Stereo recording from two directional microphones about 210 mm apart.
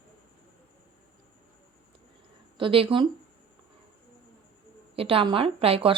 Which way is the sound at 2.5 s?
25° right (ahead or behind).